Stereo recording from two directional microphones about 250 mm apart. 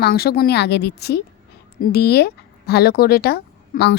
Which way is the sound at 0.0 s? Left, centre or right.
Left.